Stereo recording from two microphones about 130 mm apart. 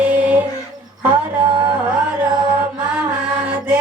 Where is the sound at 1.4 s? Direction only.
40° right (ahead or behind).